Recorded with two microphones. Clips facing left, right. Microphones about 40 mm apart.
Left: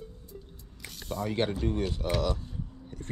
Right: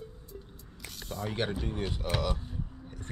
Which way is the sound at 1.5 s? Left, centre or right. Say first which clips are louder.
Left 4 dB; centre.